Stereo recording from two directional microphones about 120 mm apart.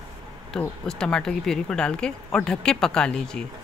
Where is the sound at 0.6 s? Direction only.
5° left (ahead or behind).